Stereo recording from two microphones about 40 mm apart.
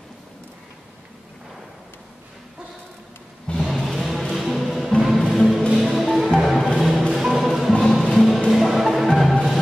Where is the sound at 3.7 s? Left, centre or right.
Centre.